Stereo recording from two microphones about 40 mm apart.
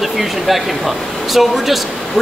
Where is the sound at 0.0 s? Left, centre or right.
Centre.